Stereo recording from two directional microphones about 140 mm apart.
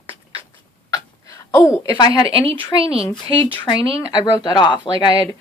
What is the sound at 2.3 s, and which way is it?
Speech, 45° right (ahead or behind).